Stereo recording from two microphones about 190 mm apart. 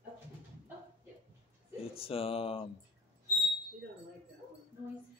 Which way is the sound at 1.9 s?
30° left (ahead or behind).